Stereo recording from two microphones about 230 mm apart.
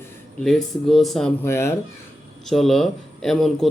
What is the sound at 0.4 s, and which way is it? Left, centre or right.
Speech, centre.